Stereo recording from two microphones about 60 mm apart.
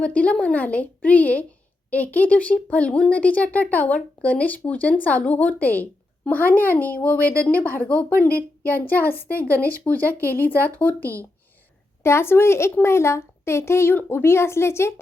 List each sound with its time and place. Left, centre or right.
0.0 s speech: left
12.0 s a woman's voice: left